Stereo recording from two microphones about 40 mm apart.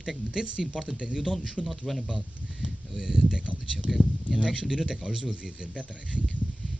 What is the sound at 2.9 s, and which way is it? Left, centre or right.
Speech, centre.